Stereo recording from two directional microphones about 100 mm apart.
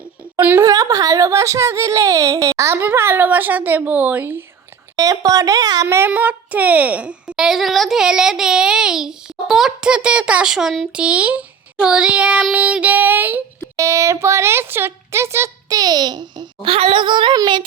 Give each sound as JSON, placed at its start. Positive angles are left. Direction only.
{"t": 0.3, "sound": "speech", "side_deg": -20}
{"t": 0.6, "sound": "speech", "side_deg": -35}
{"t": 4.9, "sound": "a woman's voice", "side_deg": -40}
{"t": 5.9, "sound": "a woman's voice", "side_deg": -20}
{"t": 13.7, "sound": "speech", "side_deg": -30}
{"t": 15.8, "sound": "speech", "side_deg": -40}
{"t": 16.6, "sound": "speech", "side_deg": -70}